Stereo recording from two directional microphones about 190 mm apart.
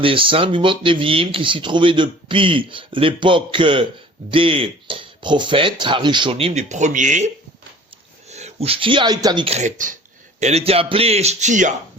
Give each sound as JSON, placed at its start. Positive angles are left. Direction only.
{"t": 0.0, "sound": "speech", "side_deg": -25}
{"t": 8.3, "sound": "a man's voice", "side_deg": -35}